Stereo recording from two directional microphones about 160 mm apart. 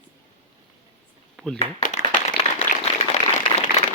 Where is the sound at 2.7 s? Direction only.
50° left (ahead or behind).